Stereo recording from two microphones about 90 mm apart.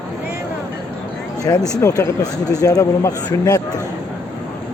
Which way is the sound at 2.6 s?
30° left (ahead or behind).